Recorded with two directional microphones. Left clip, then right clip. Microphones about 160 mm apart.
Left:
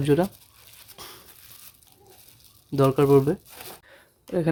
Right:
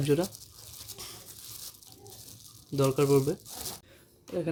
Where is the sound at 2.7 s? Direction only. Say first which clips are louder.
Left 6 dB; 35° left (ahead or behind).